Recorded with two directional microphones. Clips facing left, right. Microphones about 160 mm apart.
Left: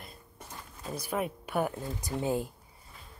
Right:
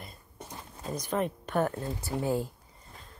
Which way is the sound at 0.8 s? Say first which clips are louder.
Right 2 dB; 10° left (ahead or behind).